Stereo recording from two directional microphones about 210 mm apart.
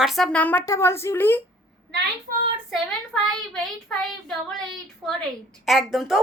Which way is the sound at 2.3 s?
45° right (ahead or behind).